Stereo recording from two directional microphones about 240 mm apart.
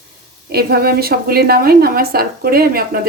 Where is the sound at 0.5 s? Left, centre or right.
Right.